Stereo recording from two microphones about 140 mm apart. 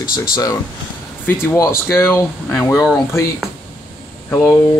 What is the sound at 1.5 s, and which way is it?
Speech, 15° left (ahead or behind).